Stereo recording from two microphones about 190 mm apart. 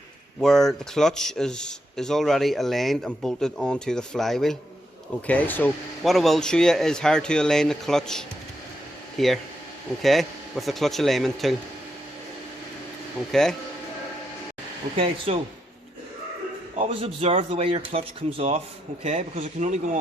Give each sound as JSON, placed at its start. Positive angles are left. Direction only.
{"t": 0.4, "sound": "speech", "side_deg": 0}
{"t": 13.3, "sound": "speech", "side_deg": 5}
{"t": 14.9, "sound": "speech", "side_deg": -30}
{"t": 16.9, "sound": "speech", "side_deg": -30}